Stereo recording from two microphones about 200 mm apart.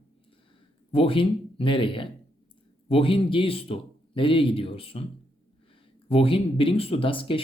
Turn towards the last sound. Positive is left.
turn(degrees=25)  # may be behind; listen again after turning